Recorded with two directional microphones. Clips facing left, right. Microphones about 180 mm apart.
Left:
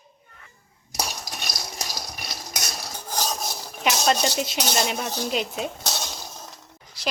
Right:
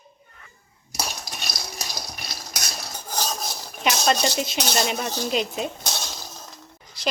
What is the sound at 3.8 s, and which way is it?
A woman's voice, 5° left (ahead or behind).